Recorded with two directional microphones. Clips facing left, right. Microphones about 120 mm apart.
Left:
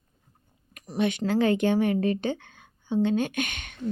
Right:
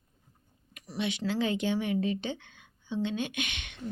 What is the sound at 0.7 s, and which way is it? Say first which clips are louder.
Speech: left 7 dB; 45° left (ahead or behind).